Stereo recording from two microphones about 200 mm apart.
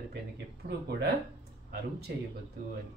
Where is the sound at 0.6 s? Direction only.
40° right (ahead or behind).